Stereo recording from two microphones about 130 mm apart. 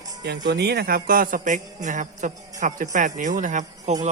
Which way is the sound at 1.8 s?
75° right (ahead or behind).